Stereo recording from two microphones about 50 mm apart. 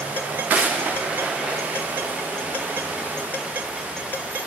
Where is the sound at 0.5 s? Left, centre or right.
Right.